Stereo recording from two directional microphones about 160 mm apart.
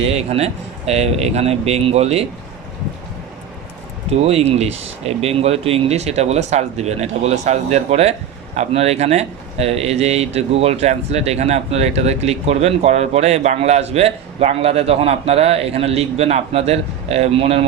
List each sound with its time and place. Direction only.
0.0 s a man's voice: 40° right (ahead or behind)
4.1 s a man's voice: 40° right (ahead or behind)